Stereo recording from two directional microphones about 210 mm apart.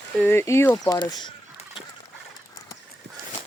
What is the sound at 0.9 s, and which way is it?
Speech, 20° left (ahead or behind).